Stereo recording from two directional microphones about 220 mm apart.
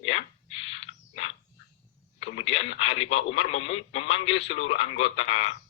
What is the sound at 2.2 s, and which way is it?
A man's voice, 25° left (ahead or behind).